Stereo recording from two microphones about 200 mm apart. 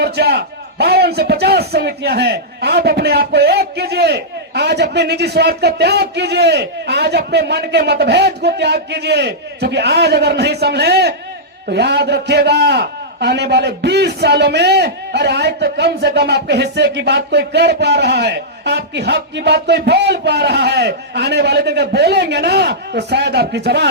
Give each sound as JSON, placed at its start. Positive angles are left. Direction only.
{"t": 0.0, "sound": "a man's voice", "side_deg": -55}